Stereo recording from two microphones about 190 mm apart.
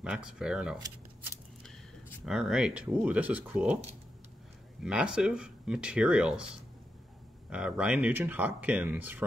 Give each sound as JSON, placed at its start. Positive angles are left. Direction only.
{"t": 0.0, "sound": "speech", "side_deg": -5}
{"t": 0.7, "sound": "shuffling cards", "side_deg": -20}
{"t": 1.6, "sound": "speech", "side_deg": 0}
{"t": 4.8, "sound": "speech", "side_deg": -5}
{"t": 7.4, "sound": "speech", "side_deg": -5}